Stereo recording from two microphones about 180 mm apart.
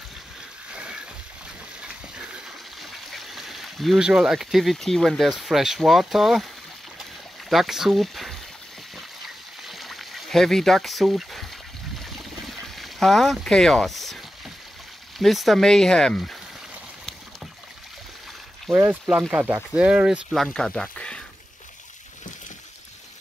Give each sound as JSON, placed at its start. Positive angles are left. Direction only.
{"t": 1.8, "sound": "water", "side_deg": -5}
{"t": 7.0, "sound": "a sound", "side_deg": 0}
{"t": 8.9, "sound": "trickle", "side_deg": 0}
{"t": 12.0, "sound": "a sound", "side_deg": 0}
{"t": 15.1, "sound": "speech", "side_deg": 0}
{"t": 18.7, "sound": "speech", "side_deg": -15}